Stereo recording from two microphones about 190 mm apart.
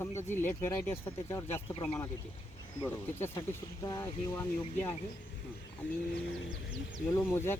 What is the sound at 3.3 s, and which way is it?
Speech, 20° left (ahead or behind).